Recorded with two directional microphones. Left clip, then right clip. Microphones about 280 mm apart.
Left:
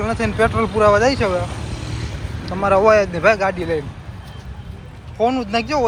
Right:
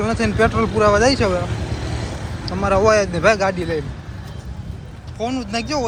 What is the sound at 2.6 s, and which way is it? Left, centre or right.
Speech, centre.